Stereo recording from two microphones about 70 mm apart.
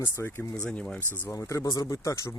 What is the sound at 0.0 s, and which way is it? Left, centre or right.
Speech, left.